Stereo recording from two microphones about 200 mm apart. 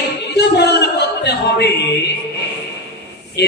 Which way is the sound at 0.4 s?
55° left (ahead or behind).